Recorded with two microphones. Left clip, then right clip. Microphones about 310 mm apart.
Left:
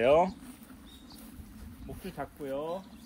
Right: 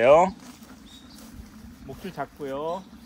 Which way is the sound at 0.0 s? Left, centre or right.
Right.